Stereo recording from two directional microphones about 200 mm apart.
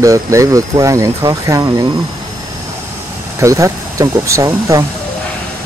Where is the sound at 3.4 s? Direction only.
15° right (ahead or behind).